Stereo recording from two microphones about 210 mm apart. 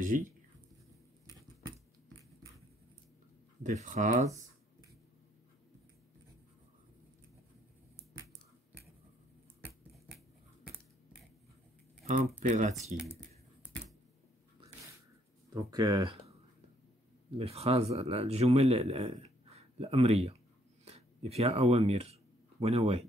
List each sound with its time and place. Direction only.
0.1 s speech: 40° right (ahead or behind)
3.6 s speech: 35° right (ahead or behind)
12.4 s speech: 35° right (ahead or behind)
15.5 s speech: 15° right (ahead or behind)
17.4 s speech: 30° right (ahead or behind)
20.8 s a sound: 30° right (ahead or behind)